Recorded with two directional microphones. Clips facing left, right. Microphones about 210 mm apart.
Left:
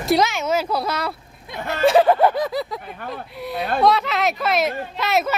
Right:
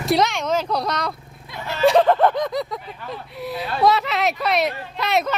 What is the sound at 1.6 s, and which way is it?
Speech, 50° left (ahead or behind).